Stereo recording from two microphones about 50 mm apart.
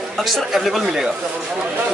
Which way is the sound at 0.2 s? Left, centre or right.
Centre.